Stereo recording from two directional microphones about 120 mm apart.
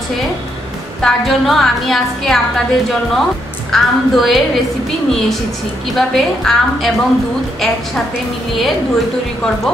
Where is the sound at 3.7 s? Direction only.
Centre (ahead or behind).